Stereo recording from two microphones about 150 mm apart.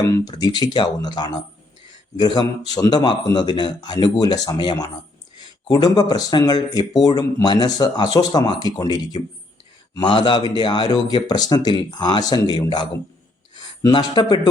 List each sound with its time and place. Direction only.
0.0 s a man's voice: 25° left (ahead or behind)